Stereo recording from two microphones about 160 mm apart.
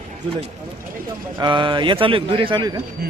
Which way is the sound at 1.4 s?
30° right (ahead or behind).